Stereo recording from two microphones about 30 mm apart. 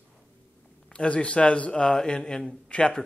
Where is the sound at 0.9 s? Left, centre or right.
Left.